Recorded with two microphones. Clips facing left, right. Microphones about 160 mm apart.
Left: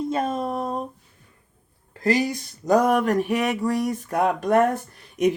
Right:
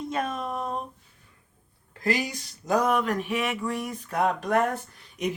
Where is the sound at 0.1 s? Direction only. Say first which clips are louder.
Left 5 dB; 30° left (ahead or behind).